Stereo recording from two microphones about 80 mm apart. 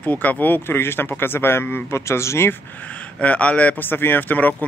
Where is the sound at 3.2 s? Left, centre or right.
Centre.